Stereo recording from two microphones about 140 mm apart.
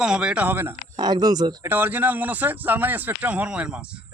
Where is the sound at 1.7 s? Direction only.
15° right (ahead or behind).